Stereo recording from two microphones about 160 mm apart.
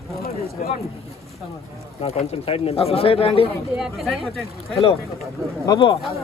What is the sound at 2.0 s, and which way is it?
Speech, 40° left (ahead or behind).